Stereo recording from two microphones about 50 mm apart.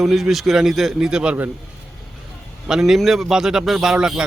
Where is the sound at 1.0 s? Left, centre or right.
Centre.